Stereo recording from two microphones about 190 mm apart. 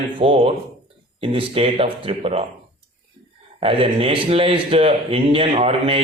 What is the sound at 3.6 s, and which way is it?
A man's voice, 30° right (ahead or behind).